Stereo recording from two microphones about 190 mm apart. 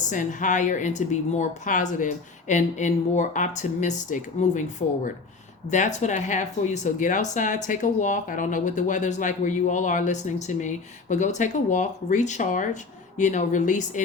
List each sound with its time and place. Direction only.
0.1 s a woman's voice: 40° left (ahead or behind)